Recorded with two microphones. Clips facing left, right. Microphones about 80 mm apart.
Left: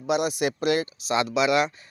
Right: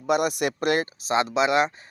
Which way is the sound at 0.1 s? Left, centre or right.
Right.